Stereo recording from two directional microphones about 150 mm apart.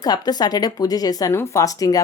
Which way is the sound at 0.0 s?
25° left (ahead or behind).